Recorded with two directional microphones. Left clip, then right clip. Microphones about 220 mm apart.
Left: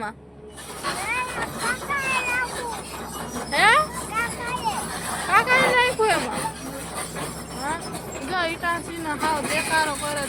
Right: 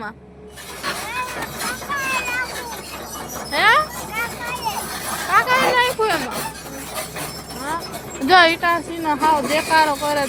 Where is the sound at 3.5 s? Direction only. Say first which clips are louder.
Right 2 dB; 10° right (ahead or behind).